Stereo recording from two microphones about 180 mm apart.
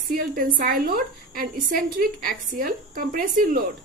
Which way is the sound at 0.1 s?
50° right (ahead or behind).